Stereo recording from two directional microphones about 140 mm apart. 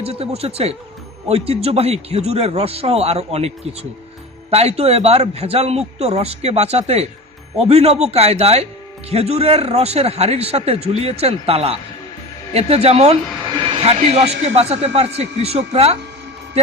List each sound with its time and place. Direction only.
0.0 s speech: 45° right (ahead or behind)